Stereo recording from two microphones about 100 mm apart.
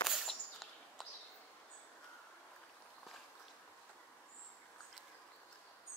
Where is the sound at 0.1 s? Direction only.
5° right (ahead or behind).